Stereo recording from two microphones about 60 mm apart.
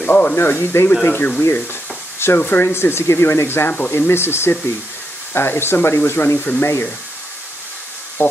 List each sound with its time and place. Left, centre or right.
0.0 s speech: left
0.5 s speech: left
1.4 s stir: left
2.4 s speech: left
2.7 s speech: left
8.2 s speech: left